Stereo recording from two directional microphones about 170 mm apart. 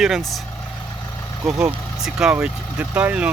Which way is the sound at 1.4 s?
5° right (ahead or behind).